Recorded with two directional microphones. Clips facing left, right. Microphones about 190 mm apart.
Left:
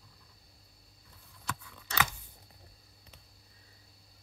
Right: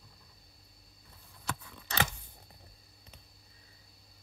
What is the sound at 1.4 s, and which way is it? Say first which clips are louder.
Scissors: right 1 dB; 35° right (ahead or behind).